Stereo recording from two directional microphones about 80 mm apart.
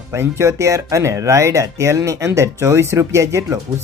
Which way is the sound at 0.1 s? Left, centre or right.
Right.